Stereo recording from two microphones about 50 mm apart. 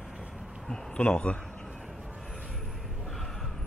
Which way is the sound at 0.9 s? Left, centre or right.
Left.